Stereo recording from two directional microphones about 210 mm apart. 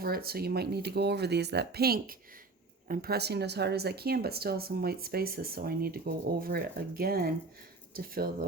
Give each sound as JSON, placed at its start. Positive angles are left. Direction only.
{"t": 0.0, "sound": "speech", "side_deg": -45}